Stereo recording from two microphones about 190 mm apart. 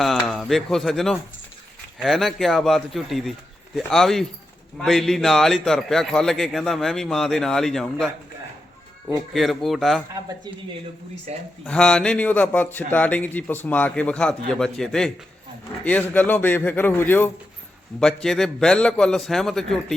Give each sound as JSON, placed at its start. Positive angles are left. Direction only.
{"t": 0.0, "sound": "a man's voice", "side_deg": 0}
{"t": 9.3, "sound": "a man's voice", "side_deg": 0}
{"t": 11.3, "sound": "speech", "side_deg": -35}
{"t": 11.6, "sound": "a man's voice", "side_deg": 5}